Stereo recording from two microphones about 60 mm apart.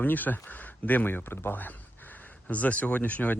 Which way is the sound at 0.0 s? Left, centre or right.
Left.